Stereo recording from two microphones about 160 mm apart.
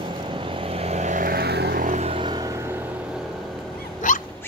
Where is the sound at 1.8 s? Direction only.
45° right (ahead or behind).